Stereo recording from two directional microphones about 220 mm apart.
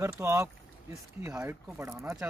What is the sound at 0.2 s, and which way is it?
Speech, 10° right (ahead or behind).